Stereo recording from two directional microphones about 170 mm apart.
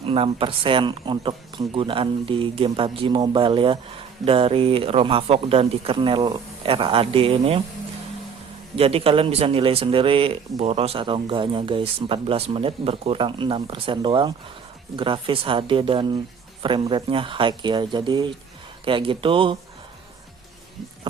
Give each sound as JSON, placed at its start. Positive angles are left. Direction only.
{"t": 0.0, "sound": "speech", "side_deg": -35}
{"t": 8.7, "sound": "speech", "side_deg": -35}